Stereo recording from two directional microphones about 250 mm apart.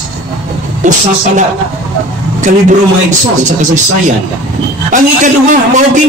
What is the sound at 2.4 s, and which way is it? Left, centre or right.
A man's voice, right.